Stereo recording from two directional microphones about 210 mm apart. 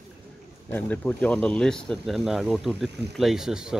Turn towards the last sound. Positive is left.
turn(degrees=0)  # may be behind; listen again after turning